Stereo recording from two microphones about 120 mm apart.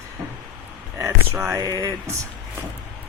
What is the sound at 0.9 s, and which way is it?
Speech, 25° right (ahead or behind).